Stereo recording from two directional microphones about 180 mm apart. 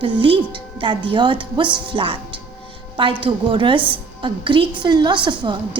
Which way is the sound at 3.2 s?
25° right (ahead or behind).